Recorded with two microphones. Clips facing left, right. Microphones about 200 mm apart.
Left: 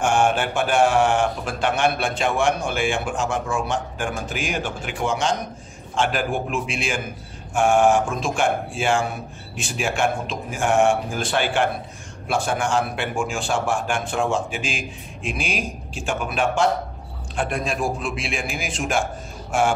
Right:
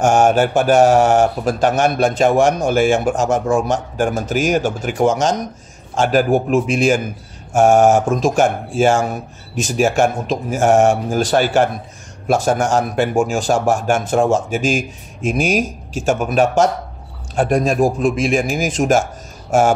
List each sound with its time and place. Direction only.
0.0 s speech: 40° right (ahead or behind)